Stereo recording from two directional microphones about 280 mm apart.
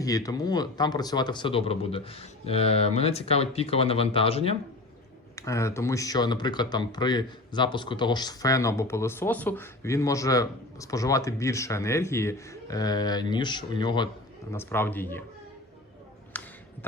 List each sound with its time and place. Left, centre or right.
0.0 s speech: centre
5.4 s speech: centre
16.3 s a sound: centre